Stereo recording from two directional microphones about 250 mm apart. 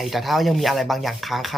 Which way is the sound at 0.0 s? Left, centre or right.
Centre.